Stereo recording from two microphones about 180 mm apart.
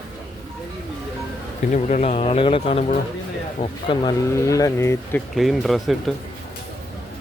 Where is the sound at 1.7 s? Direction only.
40° left (ahead or behind); by 5.2 s 15° left (ahead or behind).